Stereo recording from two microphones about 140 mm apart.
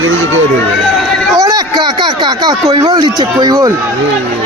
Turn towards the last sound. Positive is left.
turn(degrees=-30)  # may be behind; listen again after turning